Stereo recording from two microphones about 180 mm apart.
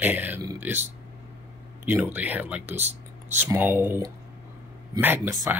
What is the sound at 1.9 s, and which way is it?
Speech, 10° right (ahead or behind).